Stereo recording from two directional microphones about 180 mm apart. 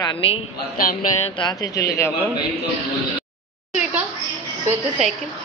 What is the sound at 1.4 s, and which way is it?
Speech, 20° left (ahead or behind).